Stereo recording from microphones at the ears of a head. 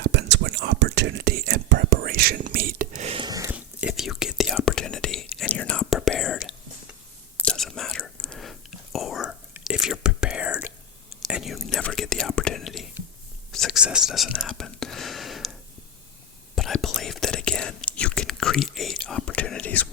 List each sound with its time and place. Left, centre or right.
0.0 s whispering: right
3.8 s whispering: left
16.6 s whispering: left